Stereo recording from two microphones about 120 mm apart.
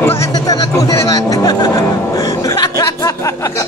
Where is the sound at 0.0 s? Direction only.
20° left (ahead or behind).